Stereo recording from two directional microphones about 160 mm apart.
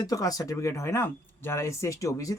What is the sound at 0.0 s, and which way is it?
Speech, 20° left (ahead or behind).